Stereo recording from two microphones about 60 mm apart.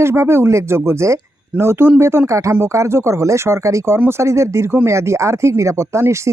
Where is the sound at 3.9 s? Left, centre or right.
Right.